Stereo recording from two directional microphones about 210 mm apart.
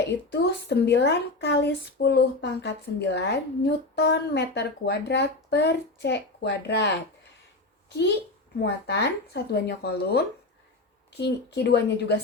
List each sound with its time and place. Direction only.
0.0 s a woman's voice: 55° left (ahead or behind)